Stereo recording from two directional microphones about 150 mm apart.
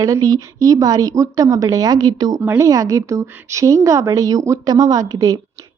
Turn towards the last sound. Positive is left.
turn(degrees=-20)  # may be behind; listen again after turning